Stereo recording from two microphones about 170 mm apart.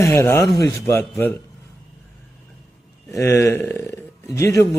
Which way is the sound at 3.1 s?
15° left (ahead or behind).